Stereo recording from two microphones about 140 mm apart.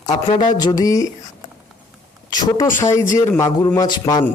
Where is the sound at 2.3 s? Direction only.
30° left (ahead or behind).